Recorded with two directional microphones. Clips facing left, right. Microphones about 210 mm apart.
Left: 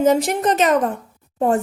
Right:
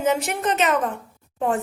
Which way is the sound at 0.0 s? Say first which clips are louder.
Left 6 dB; 35° left (ahead or behind).